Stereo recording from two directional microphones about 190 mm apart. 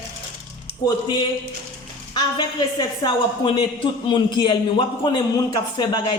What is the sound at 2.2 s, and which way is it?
A woman's voice, 25° left (ahead or behind).